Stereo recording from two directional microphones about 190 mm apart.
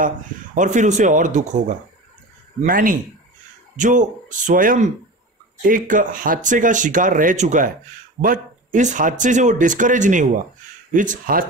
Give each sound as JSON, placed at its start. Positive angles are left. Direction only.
{"t": 0.6, "sound": "speech", "side_deg": -40}
{"t": 2.6, "sound": "a man's voice", "side_deg": -45}